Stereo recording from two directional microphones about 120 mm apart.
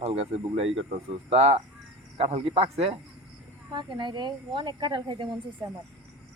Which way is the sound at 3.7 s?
40° right (ahead or behind).